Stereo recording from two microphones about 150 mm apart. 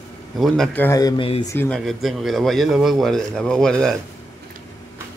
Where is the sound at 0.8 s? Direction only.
20° left (ahead or behind).